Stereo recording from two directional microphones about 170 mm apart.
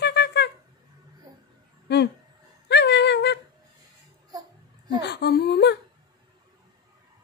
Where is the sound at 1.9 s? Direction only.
75° left (ahead or behind).